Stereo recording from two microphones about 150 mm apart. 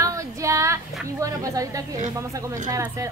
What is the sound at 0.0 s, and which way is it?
Female singing, 20° right (ahead or behind).